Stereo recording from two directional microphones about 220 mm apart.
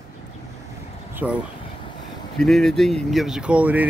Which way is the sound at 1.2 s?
5° right (ahead or behind).